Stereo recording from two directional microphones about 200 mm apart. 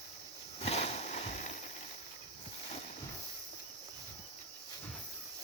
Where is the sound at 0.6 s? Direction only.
30° left (ahead or behind).